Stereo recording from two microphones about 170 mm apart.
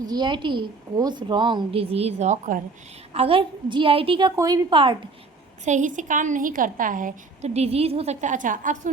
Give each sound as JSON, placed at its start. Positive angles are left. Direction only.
{"t": 0.0, "sound": "a woman's voice", "side_deg": -25}
{"t": 5.6, "sound": "a woman's voice", "side_deg": -45}